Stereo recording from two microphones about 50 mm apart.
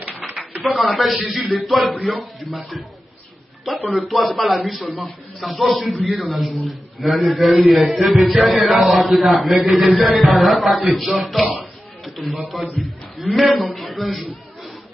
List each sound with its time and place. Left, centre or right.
0.7 s a man's voice: centre